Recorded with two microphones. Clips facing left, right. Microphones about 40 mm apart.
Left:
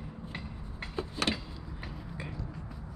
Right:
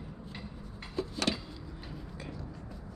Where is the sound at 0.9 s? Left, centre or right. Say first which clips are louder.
Even; left.